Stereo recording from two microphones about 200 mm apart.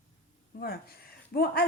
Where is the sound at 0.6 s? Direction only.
50° left (ahead or behind).